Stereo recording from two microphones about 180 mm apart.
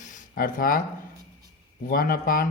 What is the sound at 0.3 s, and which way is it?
Speech, 55° left (ahead or behind).